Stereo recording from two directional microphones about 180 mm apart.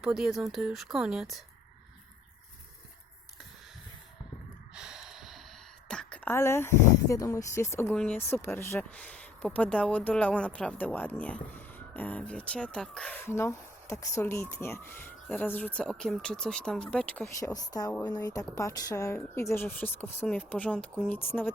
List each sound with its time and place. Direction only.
0.0 s speech: 5° right (ahead or behind)
4.7 s snort: 5° right (ahead or behind)
5.9 s speech: 5° left (ahead or behind)
17.4 s a woman's voice: 20° left (ahead or behind)